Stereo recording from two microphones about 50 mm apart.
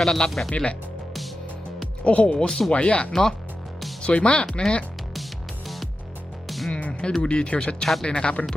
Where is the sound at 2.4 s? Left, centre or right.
Centre.